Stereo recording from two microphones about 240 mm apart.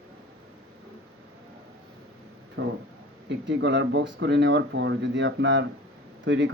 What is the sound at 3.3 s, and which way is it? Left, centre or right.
Speech, right.